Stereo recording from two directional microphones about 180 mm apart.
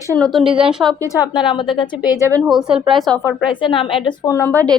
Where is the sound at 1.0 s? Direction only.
20° left (ahead or behind).